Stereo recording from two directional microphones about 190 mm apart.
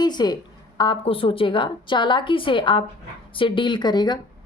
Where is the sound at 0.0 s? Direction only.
20° left (ahead or behind).